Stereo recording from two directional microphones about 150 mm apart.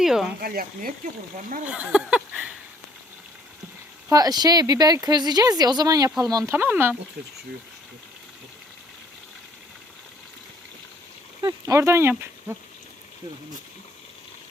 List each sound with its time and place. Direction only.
0.0 s speech: 5° right (ahead or behind)
0.3 s speech: 85° right
1.6 s a sound: 10° right (ahead or behind)
4.1 s speech: 25° right (ahead or behind)
6.1 s a sound: 25° right (ahead or behind)
11.4 s speech: 20° right (ahead or behind)